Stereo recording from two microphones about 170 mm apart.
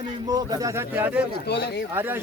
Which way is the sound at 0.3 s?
20° right (ahead or behind).